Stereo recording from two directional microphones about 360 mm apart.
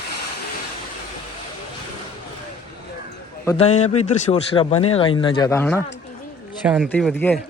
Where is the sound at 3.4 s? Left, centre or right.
Centre.